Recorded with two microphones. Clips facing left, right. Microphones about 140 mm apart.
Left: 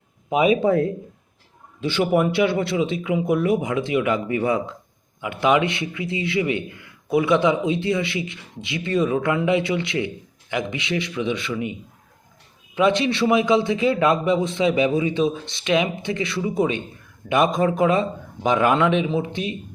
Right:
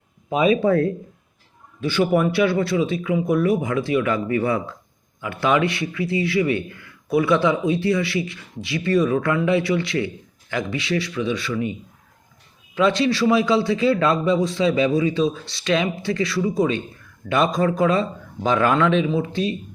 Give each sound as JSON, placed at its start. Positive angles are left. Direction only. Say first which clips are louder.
{"t": 0.3, "sound": "a man's voice", "louder": "even", "side_deg": 20}